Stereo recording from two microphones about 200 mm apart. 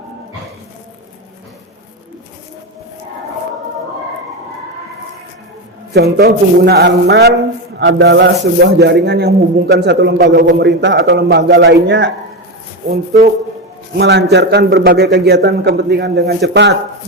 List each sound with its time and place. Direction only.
5.9 s a man's voice: 50° right (ahead or behind)
14.0 s a man's voice: 55° right (ahead or behind)